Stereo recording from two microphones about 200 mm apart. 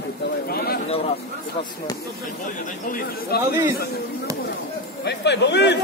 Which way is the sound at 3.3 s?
50° left (ahead or behind).